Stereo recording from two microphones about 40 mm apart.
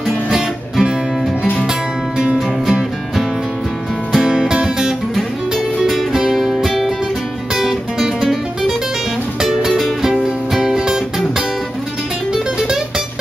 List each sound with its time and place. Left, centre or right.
0.3 s music: centre
2.6 s music: centre
4.3 s music: centre
5.1 s music: centre